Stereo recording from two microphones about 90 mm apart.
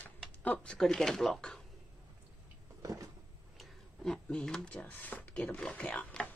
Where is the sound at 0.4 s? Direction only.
15° left (ahead or behind).